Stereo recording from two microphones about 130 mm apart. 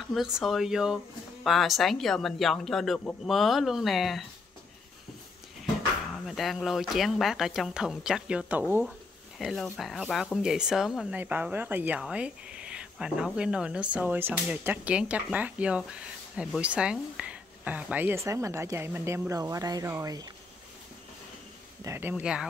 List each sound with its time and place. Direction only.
0.1 s speech: centre (ahead or behind)
6.1 s speech: centre (ahead or behind)
9.4 s speech: centre (ahead or behind); by 20.2 s 25° right (ahead or behind)
21.8 s speech: 15° right (ahead or behind)